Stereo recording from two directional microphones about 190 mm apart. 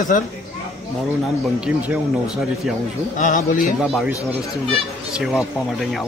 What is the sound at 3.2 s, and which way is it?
Speech, 45° left (ahead or behind).